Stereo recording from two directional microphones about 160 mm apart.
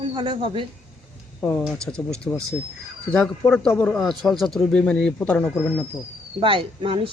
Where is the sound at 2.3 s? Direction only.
15° left (ahead or behind).